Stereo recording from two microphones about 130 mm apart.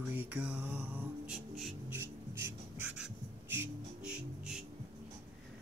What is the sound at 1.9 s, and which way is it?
Music, 15° right (ahead or behind).